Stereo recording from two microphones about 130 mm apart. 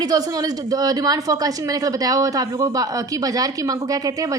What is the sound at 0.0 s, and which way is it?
Speech, 30° right (ahead or behind).